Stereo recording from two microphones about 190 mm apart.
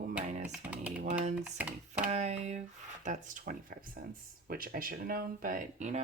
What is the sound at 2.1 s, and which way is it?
Speech, 35° right (ahead or behind).